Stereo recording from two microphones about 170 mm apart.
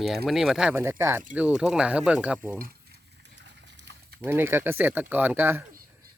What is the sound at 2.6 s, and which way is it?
Boiling, 65° right (ahead or behind).